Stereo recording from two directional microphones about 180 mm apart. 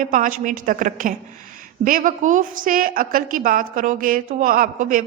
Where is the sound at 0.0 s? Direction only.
50° right (ahead or behind).